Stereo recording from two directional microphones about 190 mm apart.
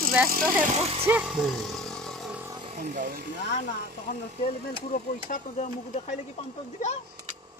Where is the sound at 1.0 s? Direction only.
5° right (ahead or behind).